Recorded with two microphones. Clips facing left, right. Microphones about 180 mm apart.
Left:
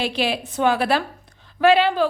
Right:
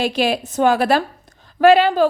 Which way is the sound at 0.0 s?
45° right (ahead or behind).